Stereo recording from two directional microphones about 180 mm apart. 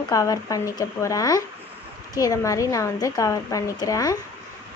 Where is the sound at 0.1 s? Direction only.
20° left (ahead or behind).